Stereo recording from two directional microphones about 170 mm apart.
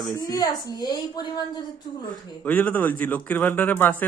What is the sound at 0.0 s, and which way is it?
A woman's voice, 20° left (ahead or behind).